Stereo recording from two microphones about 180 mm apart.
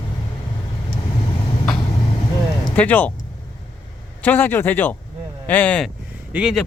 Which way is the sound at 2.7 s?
10° left (ahead or behind).